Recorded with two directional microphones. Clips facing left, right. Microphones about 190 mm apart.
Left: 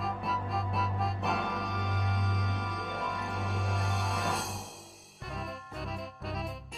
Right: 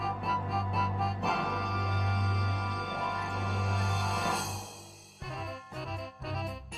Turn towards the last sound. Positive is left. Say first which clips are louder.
# even
turn(degrees=0)  # may be behind; listen again after turning